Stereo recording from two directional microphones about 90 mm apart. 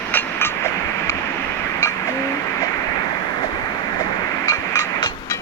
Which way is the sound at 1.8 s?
30° left (ahead or behind).